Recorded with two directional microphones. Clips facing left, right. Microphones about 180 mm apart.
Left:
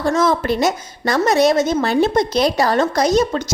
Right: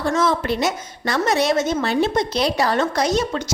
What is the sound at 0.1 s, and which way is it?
A woman's voice, 45° left (ahead or behind).